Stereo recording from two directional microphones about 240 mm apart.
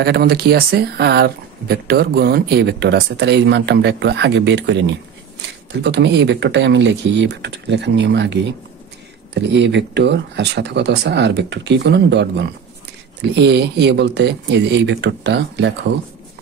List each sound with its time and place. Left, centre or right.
0.0 s speech: right